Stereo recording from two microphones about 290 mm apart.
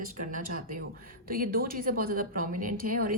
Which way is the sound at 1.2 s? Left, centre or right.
Right.